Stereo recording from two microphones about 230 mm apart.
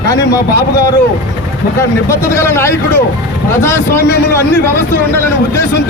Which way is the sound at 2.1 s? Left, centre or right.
Centre.